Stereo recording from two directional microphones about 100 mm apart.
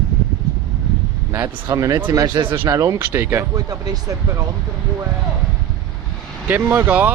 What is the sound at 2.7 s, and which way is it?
Speech, 35° right (ahead or behind).